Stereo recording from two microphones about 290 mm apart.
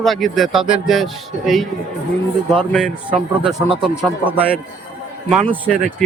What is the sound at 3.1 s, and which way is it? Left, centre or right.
Speech, centre.